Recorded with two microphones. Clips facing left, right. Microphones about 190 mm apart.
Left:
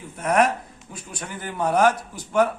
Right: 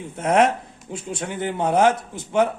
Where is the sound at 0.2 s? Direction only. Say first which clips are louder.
Right 2 dB; 25° right (ahead or behind).